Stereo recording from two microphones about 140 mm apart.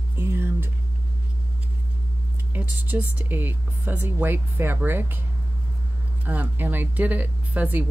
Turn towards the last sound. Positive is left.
turn(degrees=-10)  # may be behind; listen again after turning